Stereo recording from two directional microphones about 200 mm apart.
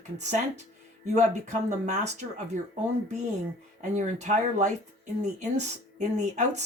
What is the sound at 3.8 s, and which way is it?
Speech, 35° right (ahead or behind).